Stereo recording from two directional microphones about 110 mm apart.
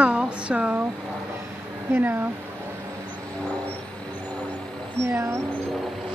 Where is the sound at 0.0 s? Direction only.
10° right (ahead or behind).